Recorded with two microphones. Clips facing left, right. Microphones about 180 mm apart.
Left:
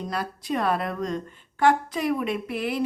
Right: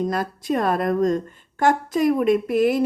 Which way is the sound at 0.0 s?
45° right (ahead or behind).